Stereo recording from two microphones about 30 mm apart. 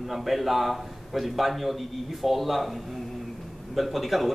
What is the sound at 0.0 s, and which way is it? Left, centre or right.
A man's voice, centre.